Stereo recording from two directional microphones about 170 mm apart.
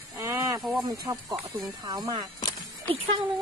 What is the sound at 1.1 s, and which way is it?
Speech, 20° right (ahead or behind).